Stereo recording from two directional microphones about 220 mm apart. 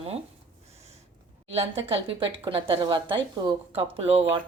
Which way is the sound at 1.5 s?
25° right (ahead or behind).